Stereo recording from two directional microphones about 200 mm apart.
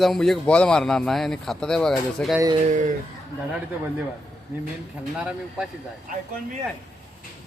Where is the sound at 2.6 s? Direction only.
40° right (ahead or behind).